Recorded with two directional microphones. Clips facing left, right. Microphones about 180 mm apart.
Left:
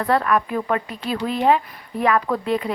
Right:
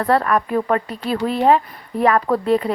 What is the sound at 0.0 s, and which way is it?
A woman's voice, 40° right (ahead or behind).